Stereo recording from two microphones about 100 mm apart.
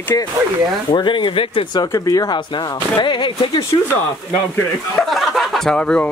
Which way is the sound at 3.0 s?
50° left (ahead or behind).